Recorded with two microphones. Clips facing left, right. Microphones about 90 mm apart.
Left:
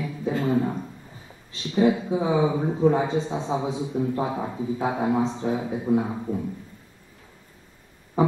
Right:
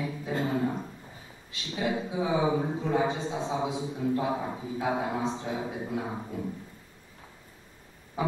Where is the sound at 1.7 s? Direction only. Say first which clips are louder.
Left 9 dB; 30° left (ahead or behind).